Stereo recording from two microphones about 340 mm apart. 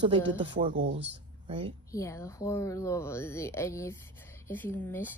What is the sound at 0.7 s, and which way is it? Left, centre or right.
Speech, right.